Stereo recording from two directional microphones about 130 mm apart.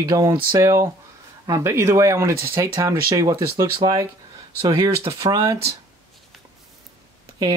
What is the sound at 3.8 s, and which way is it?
Speech, 40° right (ahead or behind).